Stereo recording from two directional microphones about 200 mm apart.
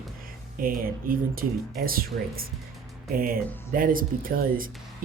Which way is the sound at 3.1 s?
45° right (ahead or behind).